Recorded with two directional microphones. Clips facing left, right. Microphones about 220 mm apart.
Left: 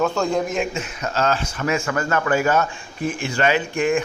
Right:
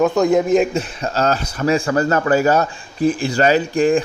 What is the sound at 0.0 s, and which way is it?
Speech, 15° right (ahead or behind).